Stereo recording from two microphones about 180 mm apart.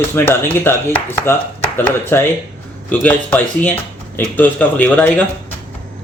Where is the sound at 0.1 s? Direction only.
10° left (ahead or behind).